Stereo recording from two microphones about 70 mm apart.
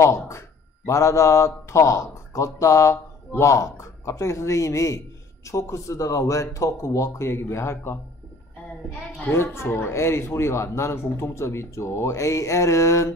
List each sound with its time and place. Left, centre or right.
0.0 s a man's voice: left
9.2 s speech: left